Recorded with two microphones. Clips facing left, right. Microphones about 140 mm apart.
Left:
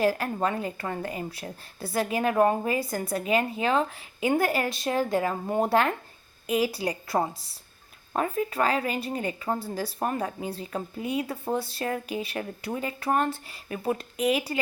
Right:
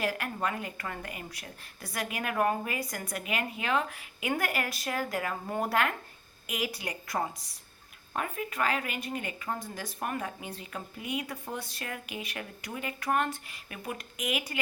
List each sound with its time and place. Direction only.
0.0 s a woman's voice: 30° left (ahead or behind)